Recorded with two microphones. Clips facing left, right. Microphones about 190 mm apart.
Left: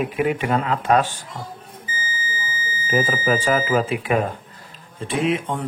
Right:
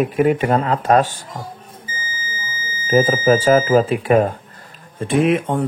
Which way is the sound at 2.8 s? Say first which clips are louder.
Right 7 dB; 40° right (ahead or behind).